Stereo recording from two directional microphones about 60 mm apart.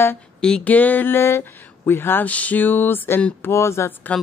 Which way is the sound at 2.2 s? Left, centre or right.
Left.